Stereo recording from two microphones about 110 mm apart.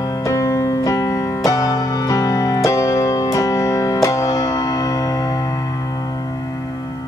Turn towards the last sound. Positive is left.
turn(degrees=35)  # may be behind; listen again after turning